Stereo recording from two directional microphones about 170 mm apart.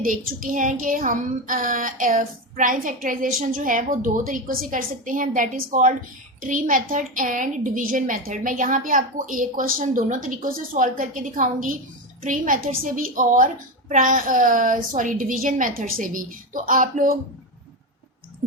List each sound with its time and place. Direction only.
0.0 s child singing: 55° right (ahead or behind)